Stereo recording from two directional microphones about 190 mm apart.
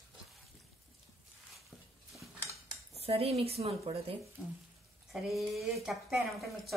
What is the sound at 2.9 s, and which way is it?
A woman's voice, 30° right (ahead or behind).